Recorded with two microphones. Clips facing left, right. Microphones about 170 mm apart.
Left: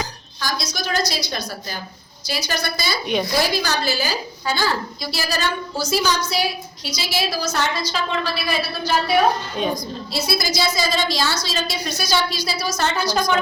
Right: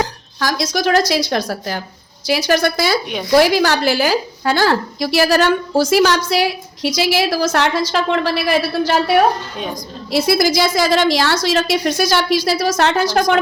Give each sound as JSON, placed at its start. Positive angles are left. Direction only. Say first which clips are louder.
{"t": 0.0, "sound": "a woman's voice", "louder": "right 8 dB", "side_deg": -85}
{"t": 9.7, "sound": "a woman's voice", "louder": "right 7 dB", "side_deg": -90}